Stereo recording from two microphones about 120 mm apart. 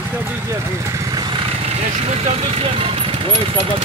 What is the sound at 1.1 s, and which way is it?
Vehicle, 40° right (ahead or behind).